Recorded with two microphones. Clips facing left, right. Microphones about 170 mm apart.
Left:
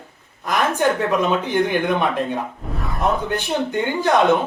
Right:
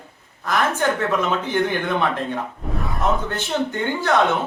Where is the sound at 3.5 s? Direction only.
15° left (ahead or behind).